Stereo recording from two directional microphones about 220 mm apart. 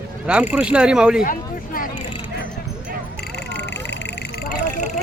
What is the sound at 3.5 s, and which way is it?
Vehicle, 50° left (ahead or behind).